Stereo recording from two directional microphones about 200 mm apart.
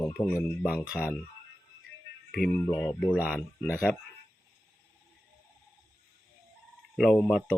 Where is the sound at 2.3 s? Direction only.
Centre (ahead or behind).